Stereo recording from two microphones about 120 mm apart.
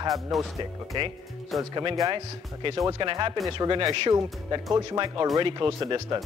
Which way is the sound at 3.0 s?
40° right (ahead or behind).